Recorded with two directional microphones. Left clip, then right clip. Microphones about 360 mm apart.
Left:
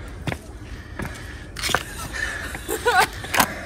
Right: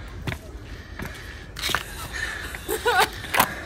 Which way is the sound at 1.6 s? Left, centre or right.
Centre.